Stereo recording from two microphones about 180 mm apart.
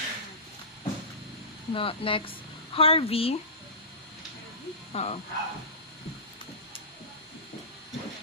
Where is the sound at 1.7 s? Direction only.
30° left (ahead or behind).